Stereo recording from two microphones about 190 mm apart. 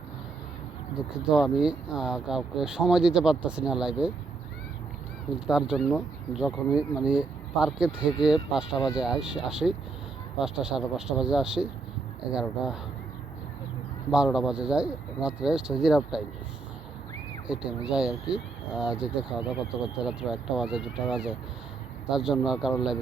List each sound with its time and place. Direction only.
0.9 s speech: 5° right (ahead or behind)
5.5 s speech: 5° right (ahead or behind)
8.7 s speech: 20° left (ahead or behind)
9.0 s speech: 5° right (ahead or behind)
14.3 s speech: 5° right (ahead or behind)
17.5 s speech: 5° right (ahead or behind)